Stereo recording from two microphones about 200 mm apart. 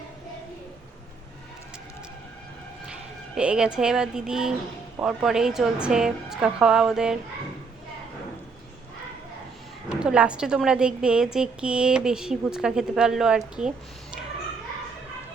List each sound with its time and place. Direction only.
2.8 s a woman's voice: 5° right (ahead or behind)
10.0 s a woman's voice: 5° right (ahead or behind)